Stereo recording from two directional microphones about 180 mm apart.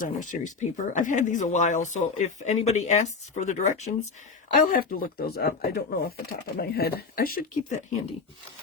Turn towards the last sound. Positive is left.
turn(degrees=50)  # may be behind; listen again after turning